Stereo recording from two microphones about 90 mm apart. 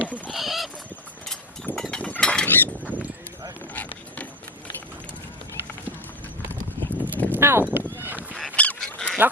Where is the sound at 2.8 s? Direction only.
15° right (ahead or behind).